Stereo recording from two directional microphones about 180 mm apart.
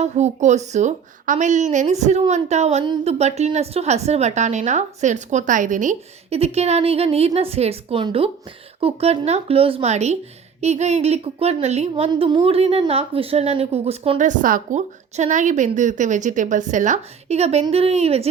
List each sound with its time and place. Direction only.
0.0 s a woman's voice: 40° right (ahead or behind)